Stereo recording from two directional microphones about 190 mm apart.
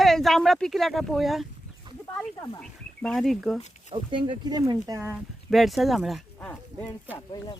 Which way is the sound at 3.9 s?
25° right (ahead or behind).